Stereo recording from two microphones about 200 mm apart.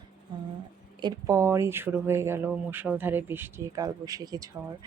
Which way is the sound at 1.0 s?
20° right (ahead or behind).